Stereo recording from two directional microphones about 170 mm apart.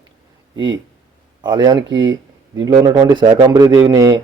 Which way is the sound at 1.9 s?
90° right.